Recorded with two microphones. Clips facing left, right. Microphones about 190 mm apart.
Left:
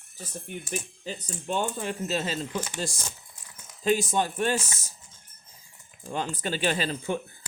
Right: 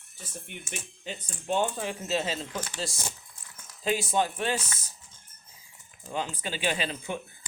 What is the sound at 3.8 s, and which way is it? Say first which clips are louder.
Speech: left 2 dB; 45° left (ahead or behind).